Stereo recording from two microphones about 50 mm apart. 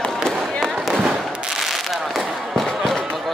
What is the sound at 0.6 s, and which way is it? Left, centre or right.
Fireworks, centre.